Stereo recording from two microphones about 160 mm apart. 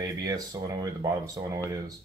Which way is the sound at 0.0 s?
25° right (ahead or behind).